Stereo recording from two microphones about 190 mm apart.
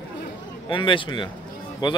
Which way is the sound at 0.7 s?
25° left (ahead or behind).